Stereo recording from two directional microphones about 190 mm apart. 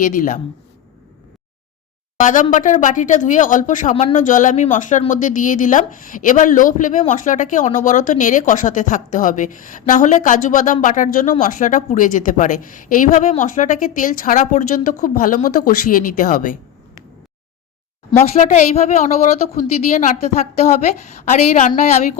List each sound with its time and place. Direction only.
0.0 s speech: 45° left (ahead or behind)
2.1 s speech: 45° left (ahead or behind)
18.2 s speech: 40° left (ahead or behind)